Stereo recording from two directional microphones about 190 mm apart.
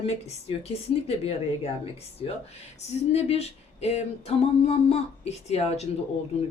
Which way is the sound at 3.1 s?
35° left (ahead or behind).